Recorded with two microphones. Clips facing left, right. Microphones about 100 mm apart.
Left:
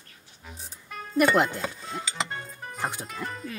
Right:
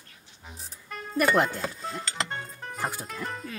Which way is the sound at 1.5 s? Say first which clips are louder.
Even; centre (ahead or behind).